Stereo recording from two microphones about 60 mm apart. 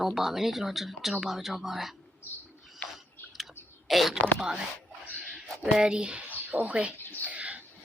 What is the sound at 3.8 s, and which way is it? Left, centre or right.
Speech, centre.